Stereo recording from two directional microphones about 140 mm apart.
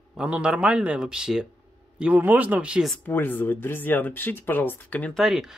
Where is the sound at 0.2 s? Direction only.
5° right (ahead or behind).